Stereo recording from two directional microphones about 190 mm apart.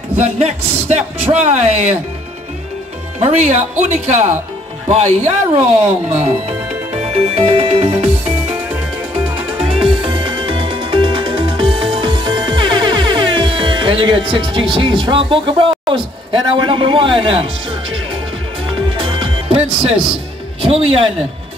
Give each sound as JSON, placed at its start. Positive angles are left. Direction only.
{"t": 0.2, "sound": "speech", "side_deg": -35}
{"t": 3.2, "sound": "speech", "side_deg": -35}
{"t": 7.0, "sound": "music", "side_deg": -35}
{"t": 9.7, "sound": "music", "side_deg": -30}
{"t": 18.9, "sound": "music", "side_deg": -25}
{"t": 20.6, "sound": "speech", "side_deg": -30}